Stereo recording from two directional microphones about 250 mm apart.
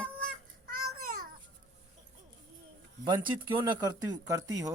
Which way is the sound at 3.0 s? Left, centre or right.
Centre.